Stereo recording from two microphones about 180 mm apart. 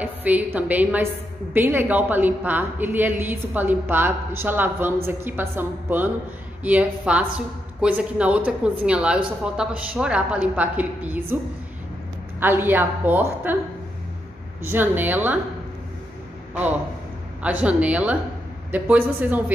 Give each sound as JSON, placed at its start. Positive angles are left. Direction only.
{"t": 0.0, "sound": "a woman's voice", "side_deg": -10}
{"t": 12.4, "sound": "a woman's voice", "side_deg": -10}
{"t": 14.7, "sound": "a woman's voice", "side_deg": -10}
{"t": 17.4, "sound": "a woman's voice", "side_deg": -10}